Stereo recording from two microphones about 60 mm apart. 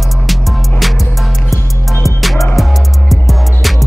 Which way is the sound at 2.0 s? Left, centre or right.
Centre.